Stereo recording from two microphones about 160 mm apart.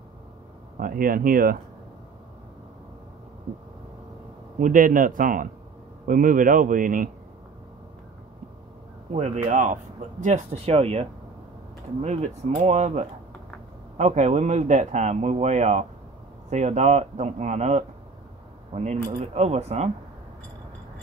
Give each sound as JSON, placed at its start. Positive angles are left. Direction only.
{"t": 0.7, "sound": "speech", "side_deg": -60}
{"t": 4.6, "sound": "speech", "side_deg": -55}
{"t": 9.1, "sound": "speech", "side_deg": -45}